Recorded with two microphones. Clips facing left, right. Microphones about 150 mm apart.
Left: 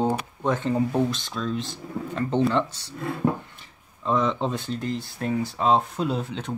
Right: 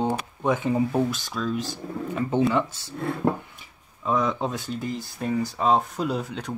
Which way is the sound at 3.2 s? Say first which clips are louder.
Even; 50° right (ahead or behind).